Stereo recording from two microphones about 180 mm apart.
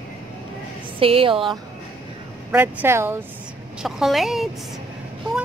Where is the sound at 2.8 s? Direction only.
15° right (ahead or behind).